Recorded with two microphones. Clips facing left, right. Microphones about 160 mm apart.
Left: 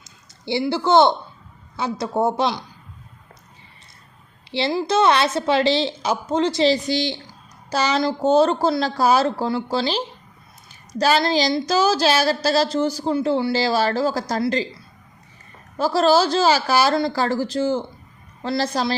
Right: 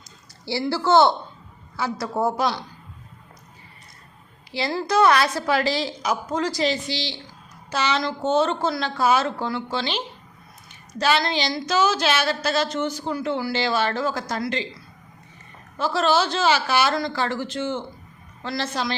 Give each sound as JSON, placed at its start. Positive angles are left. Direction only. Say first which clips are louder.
{"t": 0.7, "sound": "a woman's voice", "louder": "left 1 dB", "side_deg": 20}
{"t": 4.5, "sound": "a woman's voice", "louder": "left 2 dB", "side_deg": 25}
{"t": 6.8, "sound": "a woman's voice", "louder": "left 7 dB", "side_deg": 50}
{"t": 7.7, "sound": "a woman's voice", "louder": "left 4 dB", "side_deg": 40}
{"t": 15.8, "sound": "a woman's voice", "louder": "left 4 dB", "side_deg": 40}